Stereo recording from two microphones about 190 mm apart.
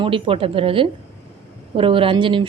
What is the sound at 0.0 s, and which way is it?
Speech, 30° right (ahead or behind).